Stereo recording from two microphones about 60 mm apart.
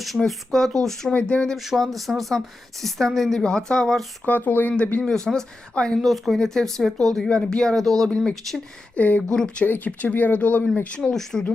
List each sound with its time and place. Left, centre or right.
0.3 s speech: centre
1.1 s speech: centre
1.5 s speech: centre
4.3 s speech: left
5.0 s speech: centre
6.0 s speech: centre
9.0 s speech: left
9.3 s speech: centre
9.6 s speech: left
11.1 s speech: centre